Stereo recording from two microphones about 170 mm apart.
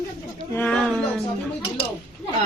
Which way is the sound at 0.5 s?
5° left (ahead or behind).